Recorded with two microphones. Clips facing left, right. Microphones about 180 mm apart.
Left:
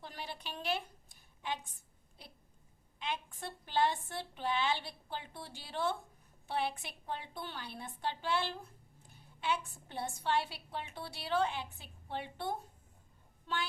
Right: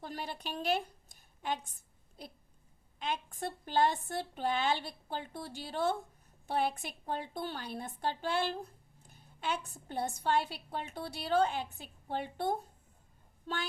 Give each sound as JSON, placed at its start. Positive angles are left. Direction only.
{"t": 0.0, "sound": "a woman's voice", "side_deg": -45}
{"t": 3.0, "sound": "a woman's voice", "side_deg": -45}
{"t": 13.5, "sound": "child singing", "side_deg": -40}